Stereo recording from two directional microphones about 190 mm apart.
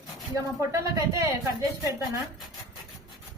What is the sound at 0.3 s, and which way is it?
Speech, 15° right (ahead or behind).